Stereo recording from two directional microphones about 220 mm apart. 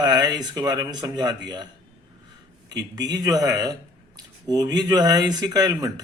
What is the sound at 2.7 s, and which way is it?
Speech, 15° right (ahead or behind).